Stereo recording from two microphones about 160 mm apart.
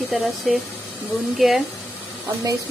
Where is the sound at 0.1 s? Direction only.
Centre (ahead or behind).